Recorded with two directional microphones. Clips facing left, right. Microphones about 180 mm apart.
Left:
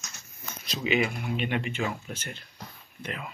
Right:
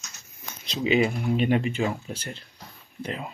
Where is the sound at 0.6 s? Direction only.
25° right (ahead or behind).